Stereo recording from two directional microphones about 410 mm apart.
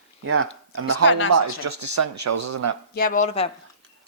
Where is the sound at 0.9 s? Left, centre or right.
Left.